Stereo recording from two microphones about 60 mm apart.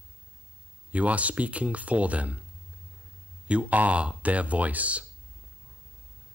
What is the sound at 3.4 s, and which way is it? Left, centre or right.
Speech, right.